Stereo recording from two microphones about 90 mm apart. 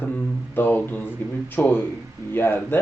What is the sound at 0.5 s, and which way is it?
Speech, 25° left (ahead or behind).